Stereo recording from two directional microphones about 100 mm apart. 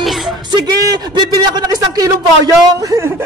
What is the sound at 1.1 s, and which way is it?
A man's voice, 45° right (ahead or behind).